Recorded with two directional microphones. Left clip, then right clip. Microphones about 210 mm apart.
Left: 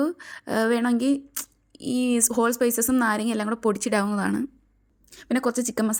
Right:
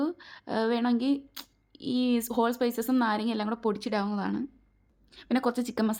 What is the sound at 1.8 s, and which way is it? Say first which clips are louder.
Speech: left 3 dB; 40° left (ahead or behind).